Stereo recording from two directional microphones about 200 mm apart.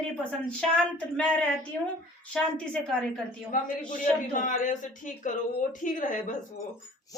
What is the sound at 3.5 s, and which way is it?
Speech, 40° left (ahead or behind).